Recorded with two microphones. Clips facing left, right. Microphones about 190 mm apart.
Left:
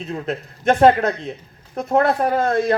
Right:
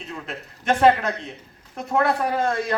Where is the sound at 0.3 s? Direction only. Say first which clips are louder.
Left 5 dB; 40° left (ahead or behind).